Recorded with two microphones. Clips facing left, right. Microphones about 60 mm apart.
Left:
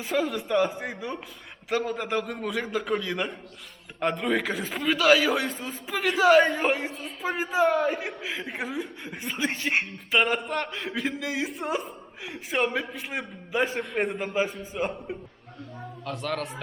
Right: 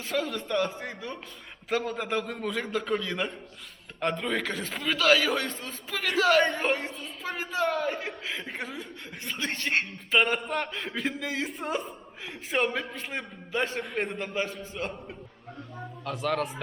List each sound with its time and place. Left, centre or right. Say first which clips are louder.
0.0 s a man's voice: left 3 dB; centre
1.7 s a man's voice: left 2 dB; centre
16.0 s a man's voice: right 2 dB; centre